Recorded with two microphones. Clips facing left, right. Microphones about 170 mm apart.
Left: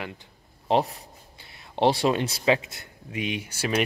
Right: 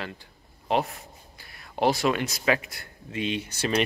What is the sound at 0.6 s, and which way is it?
Speech, 35° left (ahead or behind).